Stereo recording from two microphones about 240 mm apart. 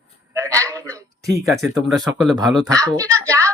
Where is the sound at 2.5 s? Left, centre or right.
Centre.